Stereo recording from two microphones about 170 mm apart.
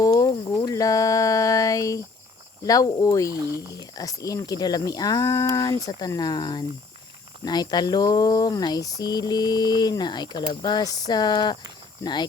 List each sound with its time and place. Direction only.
0.0 s a sound: 20° left (ahead or behind)
2.6 s speech: 20° left (ahead or behind)
3.3 s speech: 20° right (ahead or behind)
3.7 s speech: 20° left (ahead or behind)